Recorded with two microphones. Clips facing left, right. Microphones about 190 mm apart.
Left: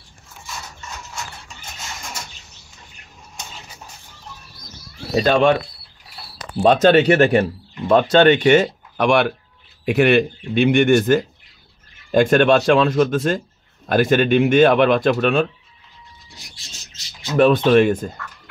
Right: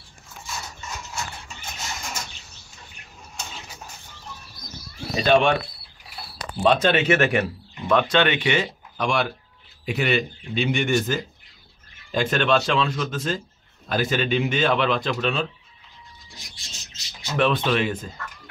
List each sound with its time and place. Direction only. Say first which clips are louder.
5.2 s speech: left 2 dB; 40° left (ahead or behind)
6.6 s speech: left 6 dB; 40° left (ahead or behind); by 15.4 s 60° left (ahead or behind)
17.4 s speech: left 9 dB; 45° left (ahead or behind)